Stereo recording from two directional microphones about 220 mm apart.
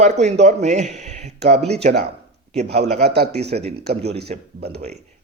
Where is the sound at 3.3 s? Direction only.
30° right (ahead or behind).